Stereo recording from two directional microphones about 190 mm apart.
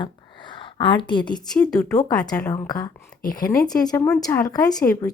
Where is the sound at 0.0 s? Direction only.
25° left (ahead or behind).